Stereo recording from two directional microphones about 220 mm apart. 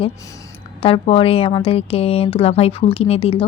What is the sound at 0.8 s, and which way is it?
A woman's voice, 25° left (ahead or behind).